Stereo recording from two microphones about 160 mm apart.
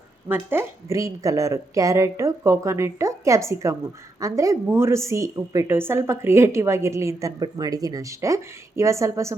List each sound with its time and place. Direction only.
0.3 s a woman's voice: 15° right (ahead or behind)